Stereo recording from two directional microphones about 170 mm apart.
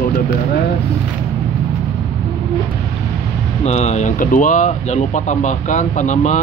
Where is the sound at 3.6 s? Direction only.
40° left (ahead or behind).